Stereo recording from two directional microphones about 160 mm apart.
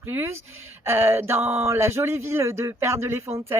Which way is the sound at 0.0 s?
15° right (ahead or behind).